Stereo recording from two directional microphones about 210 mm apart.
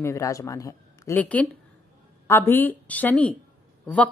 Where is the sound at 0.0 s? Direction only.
15° left (ahead or behind).